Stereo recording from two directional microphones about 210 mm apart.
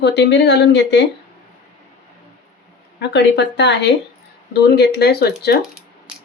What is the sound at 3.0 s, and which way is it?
Speech, 55° left (ahead or behind).